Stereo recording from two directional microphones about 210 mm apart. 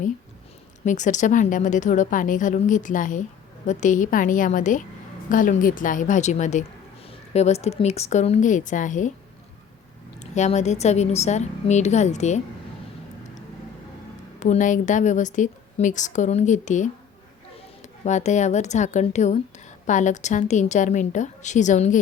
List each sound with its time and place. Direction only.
0.9 s a woman's voice: 35° left (ahead or behind)
10.2 s a woman's voice: 35° left (ahead or behind)
14.3 s a woman's voice: 35° left (ahead or behind)
18.0 s a woman's voice: 35° left (ahead or behind)